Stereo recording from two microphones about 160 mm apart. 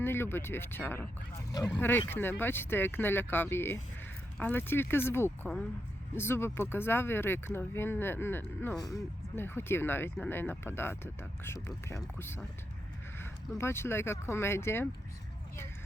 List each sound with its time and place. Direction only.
0.0 s speech: 15° left (ahead or behind)
1.8 s speech: 15° left (ahead or behind)
13.6 s speech: 15° left (ahead or behind)